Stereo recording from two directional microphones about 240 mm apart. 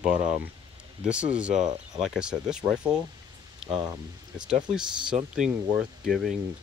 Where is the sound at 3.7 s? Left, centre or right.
Centre.